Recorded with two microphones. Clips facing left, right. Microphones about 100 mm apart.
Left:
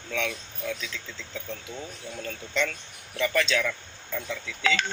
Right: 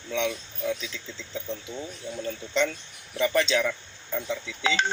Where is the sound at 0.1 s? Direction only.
20° right (ahead or behind).